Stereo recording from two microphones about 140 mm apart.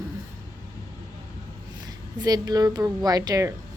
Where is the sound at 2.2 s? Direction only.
30° right (ahead or behind).